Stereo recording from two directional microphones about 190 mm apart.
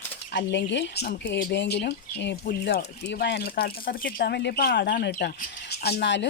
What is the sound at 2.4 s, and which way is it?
Speech, 50° left (ahead or behind).